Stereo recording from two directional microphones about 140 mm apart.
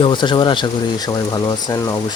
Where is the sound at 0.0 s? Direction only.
35° left (ahead or behind).